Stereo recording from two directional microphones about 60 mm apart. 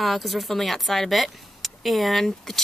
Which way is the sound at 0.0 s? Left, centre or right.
Centre.